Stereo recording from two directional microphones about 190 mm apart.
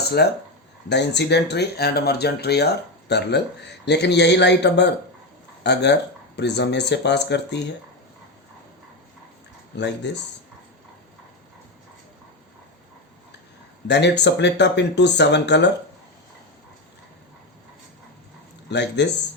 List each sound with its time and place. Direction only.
0.2 s speech: 55° left (ahead or behind)
9.7 s speech: 65° left (ahead or behind)
13.8 s speech: 65° left (ahead or behind)
18.7 s speech: 65° left (ahead or behind)